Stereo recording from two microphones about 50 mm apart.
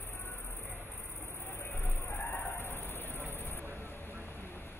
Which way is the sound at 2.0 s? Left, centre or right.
Left.